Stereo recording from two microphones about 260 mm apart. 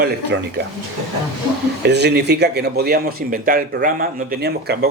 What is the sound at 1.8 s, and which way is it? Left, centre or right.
Speech, right.